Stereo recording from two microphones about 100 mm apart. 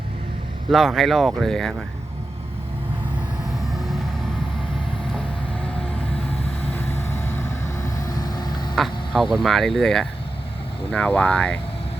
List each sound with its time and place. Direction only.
0.7 s speech: centre (ahead or behind)
6.9 s vehicle: 25° left (ahead or behind)
8.7 s speech: centre (ahead or behind)